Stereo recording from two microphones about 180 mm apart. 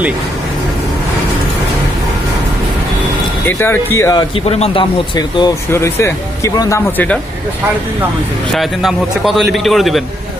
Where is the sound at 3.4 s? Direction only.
10° left (ahead or behind).